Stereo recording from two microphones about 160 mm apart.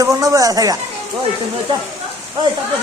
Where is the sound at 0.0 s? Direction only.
20° right (ahead or behind).